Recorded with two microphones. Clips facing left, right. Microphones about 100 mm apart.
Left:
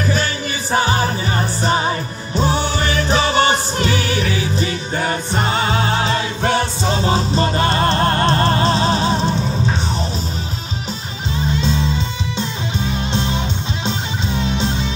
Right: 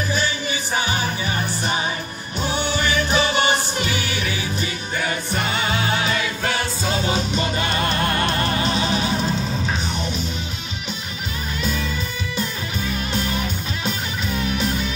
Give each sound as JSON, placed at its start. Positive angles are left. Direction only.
{"t": 0.1, "sound": "music", "side_deg": 40}
{"t": 11.4, "sound": "music", "side_deg": 25}